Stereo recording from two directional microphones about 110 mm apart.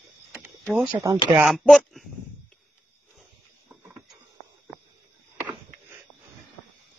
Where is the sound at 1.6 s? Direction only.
5° left (ahead or behind).